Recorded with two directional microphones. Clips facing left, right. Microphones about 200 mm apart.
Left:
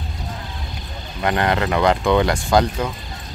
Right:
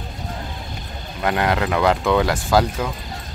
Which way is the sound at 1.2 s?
5° right (ahead or behind).